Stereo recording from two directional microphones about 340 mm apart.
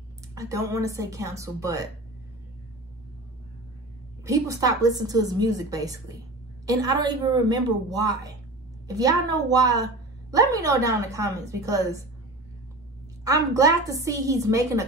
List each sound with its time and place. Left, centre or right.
0.3 s a woman's voice: centre
4.2 s a woman's voice: centre
13.6 s a woman's voice: centre